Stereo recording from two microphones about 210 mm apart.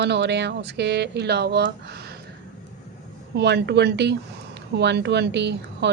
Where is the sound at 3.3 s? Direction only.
55° right (ahead or behind).